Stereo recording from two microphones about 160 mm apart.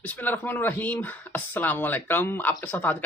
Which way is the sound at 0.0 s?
10° left (ahead or behind).